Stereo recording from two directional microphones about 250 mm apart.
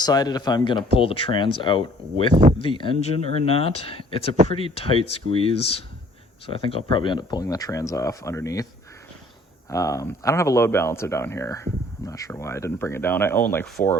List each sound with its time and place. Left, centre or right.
0.0 s speech: centre
9.6 s speech: centre